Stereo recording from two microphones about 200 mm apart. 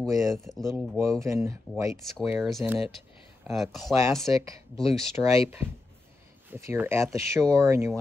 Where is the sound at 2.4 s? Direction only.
Centre (ahead or behind).